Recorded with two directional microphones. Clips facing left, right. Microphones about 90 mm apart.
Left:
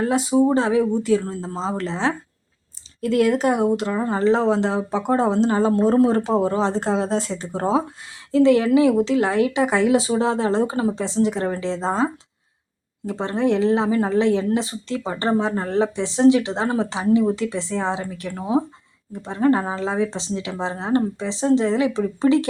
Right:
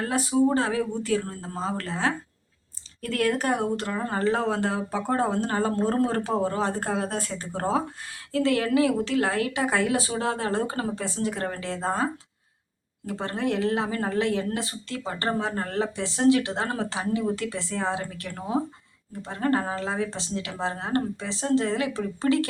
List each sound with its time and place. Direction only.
0.0 s speech: 20° left (ahead or behind)
13.1 s speech: 20° left (ahead or behind)